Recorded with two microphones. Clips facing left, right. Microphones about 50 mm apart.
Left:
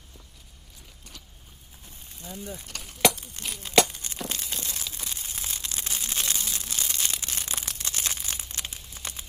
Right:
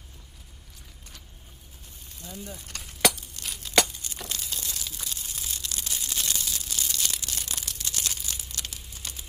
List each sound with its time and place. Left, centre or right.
2.2 s speech: left
3.2 s crumpling: left
9.0 s a sound: left